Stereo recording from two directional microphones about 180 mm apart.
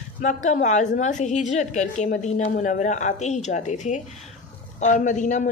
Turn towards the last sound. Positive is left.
turn(degrees=45)  # may be behind; listen again after turning